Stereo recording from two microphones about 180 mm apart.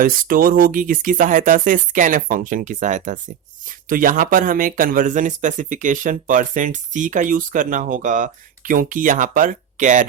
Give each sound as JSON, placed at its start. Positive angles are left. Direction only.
{"t": 0.0, "sound": "speech", "side_deg": -50}